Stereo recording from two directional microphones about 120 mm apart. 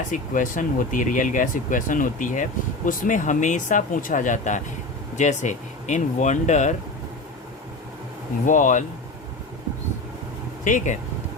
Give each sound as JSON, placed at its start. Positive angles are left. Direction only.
{"t": 0.1, "sound": "speech", "side_deg": 90}
{"t": 8.4, "sound": "speech", "side_deg": 90}
{"t": 10.6, "sound": "speech", "side_deg": 90}